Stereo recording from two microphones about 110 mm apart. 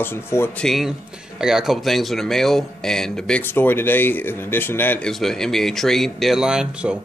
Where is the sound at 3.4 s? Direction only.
20° left (ahead or behind).